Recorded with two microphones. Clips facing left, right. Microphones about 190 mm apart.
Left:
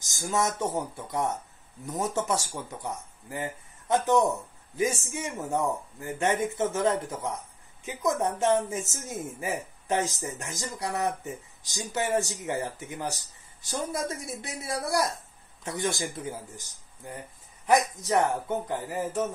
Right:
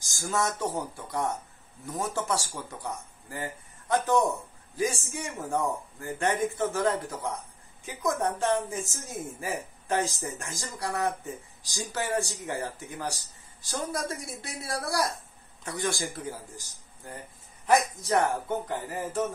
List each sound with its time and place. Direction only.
0.0 s speech: 20° left (ahead or behind)
17.6 s speech: 20° left (ahead or behind)